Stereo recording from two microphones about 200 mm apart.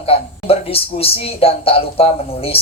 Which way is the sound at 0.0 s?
30° left (ahead or behind).